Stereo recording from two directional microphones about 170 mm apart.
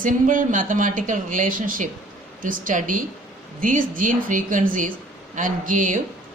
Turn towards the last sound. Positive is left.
turn(degrees=-50)  # may be behind; listen again after turning